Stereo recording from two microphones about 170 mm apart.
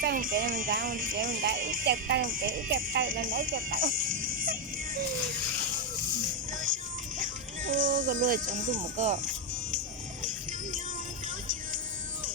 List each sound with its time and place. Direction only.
0.0 s speech: 55° right (ahead or behind)
7.2 s music: 50° right (ahead or behind)
7.9 s speech: 50° right (ahead or behind)